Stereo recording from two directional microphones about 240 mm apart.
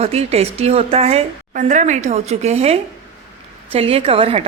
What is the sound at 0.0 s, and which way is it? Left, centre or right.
A woman's voice, right.